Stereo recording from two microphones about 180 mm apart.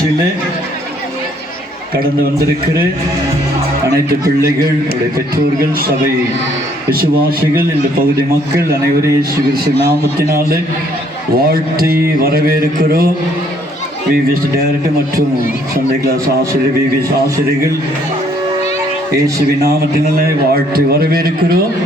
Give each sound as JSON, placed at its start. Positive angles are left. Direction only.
{"t": 4.1, "sound": "a man's voice", "side_deg": -55}
{"t": 6.9, "sound": "a man's voice", "side_deg": -55}
{"t": 10.2, "sound": "a man's voice", "side_deg": -55}
{"t": 19.6, "sound": "a man's voice", "side_deg": -60}